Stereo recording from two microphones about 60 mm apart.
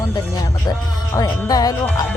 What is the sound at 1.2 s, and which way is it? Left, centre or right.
Speech, left.